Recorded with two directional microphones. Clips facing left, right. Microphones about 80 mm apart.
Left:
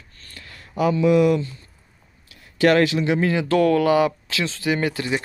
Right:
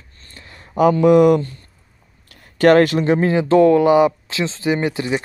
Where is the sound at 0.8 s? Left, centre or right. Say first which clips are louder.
Right 5 dB; right.